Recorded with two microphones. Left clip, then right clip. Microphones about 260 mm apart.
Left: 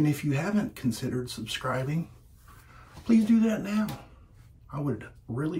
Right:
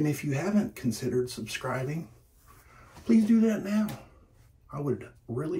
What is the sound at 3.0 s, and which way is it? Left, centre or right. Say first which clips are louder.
Speech: even; left.